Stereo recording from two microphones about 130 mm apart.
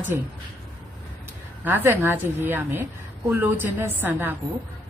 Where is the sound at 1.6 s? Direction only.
15° right (ahead or behind).